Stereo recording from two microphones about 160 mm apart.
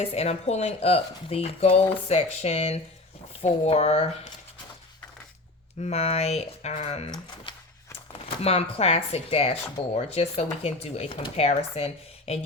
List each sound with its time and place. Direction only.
0.0 s speech: 40° left (ahead or behind)
5.8 s speech: 40° left (ahead or behind)
7.1 s speech: 30° left (ahead or behind)
8.4 s speech: 40° left (ahead or behind)